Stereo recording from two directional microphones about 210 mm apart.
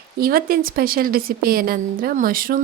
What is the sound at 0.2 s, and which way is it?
Speech, 45° right (ahead or behind).